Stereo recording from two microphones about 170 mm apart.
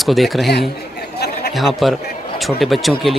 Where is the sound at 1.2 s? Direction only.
70° left (ahead or behind).